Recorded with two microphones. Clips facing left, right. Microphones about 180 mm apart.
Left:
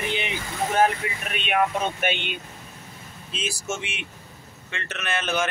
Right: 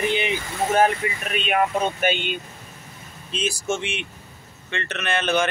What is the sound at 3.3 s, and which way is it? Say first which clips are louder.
Speech: right 5 dB; 5° left (ahead or behind).